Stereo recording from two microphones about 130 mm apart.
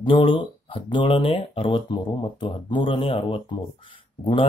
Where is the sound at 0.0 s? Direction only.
40° left (ahead or behind).